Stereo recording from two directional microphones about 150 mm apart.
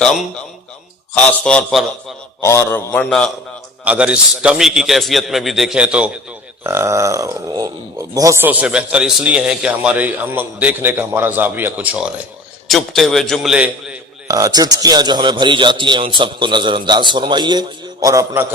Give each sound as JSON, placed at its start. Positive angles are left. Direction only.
{"t": 1.1, "sound": "a man's voice", "side_deg": 5}
{"t": 2.4, "sound": "a man's voice", "side_deg": 20}
{"t": 3.8, "sound": "a man's voice", "side_deg": -10}
{"t": 6.7, "sound": "speech", "side_deg": -20}
{"t": 12.6, "sound": "a man's voice", "side_deg": 0}
{"t": 14.3, "sound": "a man's voice", "side_deg": -25}